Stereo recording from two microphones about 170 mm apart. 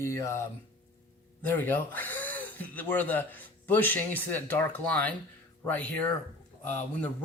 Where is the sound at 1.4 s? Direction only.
10° left (ahead or behind).